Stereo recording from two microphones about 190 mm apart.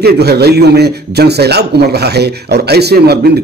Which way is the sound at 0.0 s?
55° right (ahead or behind).